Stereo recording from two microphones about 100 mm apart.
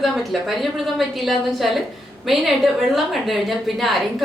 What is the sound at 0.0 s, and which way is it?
A woman's voice, centre (ahead or behind).